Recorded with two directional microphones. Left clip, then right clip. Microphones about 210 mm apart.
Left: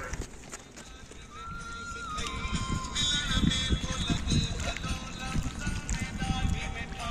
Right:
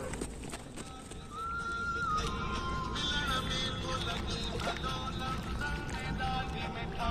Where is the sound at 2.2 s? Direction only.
15° left (ahead or behind).